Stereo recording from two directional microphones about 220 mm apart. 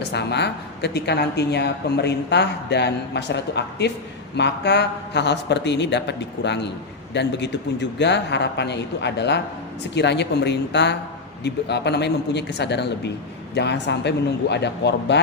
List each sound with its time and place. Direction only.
0.1 s speech: 50° left (ahead or behind)